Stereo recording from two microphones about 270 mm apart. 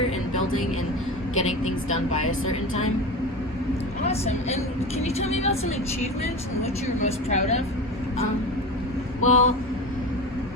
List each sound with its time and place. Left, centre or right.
0.3 s vehicle: left
1.4 s a woman's voice: left
4.0 s a woman's voice: left
7.0 s a woman's voice: left
9.2 s a woman's voice: left